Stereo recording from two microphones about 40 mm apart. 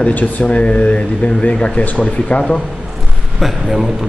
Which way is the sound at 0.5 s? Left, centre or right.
Left.